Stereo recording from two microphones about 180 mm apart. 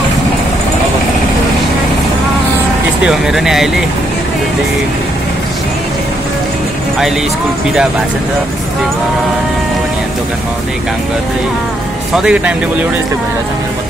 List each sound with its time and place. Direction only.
3.0 s speech: 5° right (ahead or behind)
12.2 s speech: 5° right (ahead or behind)